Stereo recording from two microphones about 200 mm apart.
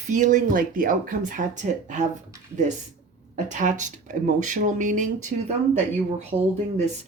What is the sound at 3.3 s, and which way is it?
Speech, 40° right (ahead or behind).